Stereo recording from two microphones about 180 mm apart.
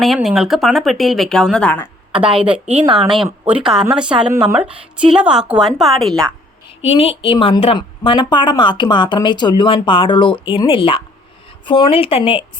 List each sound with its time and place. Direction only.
0.0 s speech: centre (ahead or behind)
2.7 s speech: 30° right (ahead or behind)
3.0 s speech: centre (ahead or behind)
4.3 s a woman's voice: 20° right (ahead or behind)
4.5 s a woman's voice: 5° right (ahead or behind)
6.8 s a woman's voice: 35° left (ahead or behind)